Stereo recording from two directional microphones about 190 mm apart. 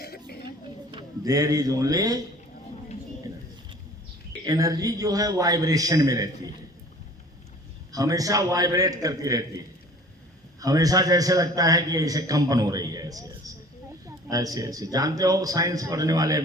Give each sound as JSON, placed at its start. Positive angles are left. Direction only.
{"t": 0.3, "sound": "a sound", "side_deg": 55}
{"t": 0.9, "sound": "speech", "side_deg": -20}
{"t": 4.4, "sound": "a man's voice", "side_deg": -20}
{"t": 7.9, "sound": "a man's voice", "side_deg": -20}
{"t": 10.6, "sound": "a man's voice", "side_deg": -20}